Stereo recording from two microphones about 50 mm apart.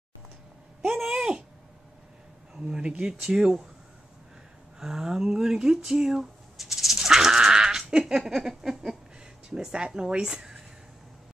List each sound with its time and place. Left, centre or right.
0.8 s speech: centre
2.6 s speech: centre
4.7 s speech: centre